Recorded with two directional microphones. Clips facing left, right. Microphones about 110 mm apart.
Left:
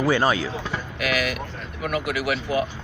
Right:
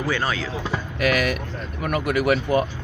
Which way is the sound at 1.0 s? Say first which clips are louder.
Right 4 dB; 45° right (ahead or behind).